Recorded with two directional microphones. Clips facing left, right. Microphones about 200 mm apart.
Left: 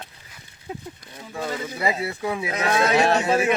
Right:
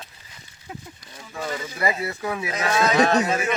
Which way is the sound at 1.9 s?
15° left (ahead or behind).